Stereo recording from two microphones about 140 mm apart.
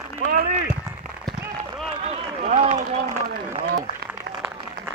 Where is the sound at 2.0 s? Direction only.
55° right (ahead or behind).